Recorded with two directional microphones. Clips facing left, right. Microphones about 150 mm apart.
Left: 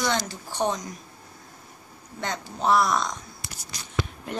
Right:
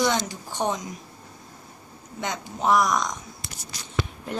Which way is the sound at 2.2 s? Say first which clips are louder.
Right 1 dB; 15° right (ahead or behind).